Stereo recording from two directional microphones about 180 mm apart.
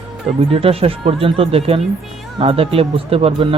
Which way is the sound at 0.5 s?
30° right (ahead or behind).